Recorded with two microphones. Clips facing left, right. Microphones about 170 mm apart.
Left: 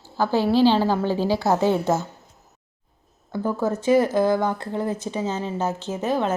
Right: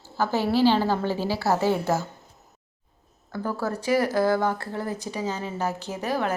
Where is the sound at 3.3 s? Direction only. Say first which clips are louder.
Left 5 dB; 20° left (ahead or behind).